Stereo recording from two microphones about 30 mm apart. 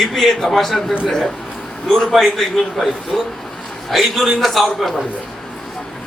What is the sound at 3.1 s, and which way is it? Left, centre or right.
Speech, left.